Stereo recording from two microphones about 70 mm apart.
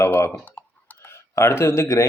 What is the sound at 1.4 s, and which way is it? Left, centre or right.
Speech, left.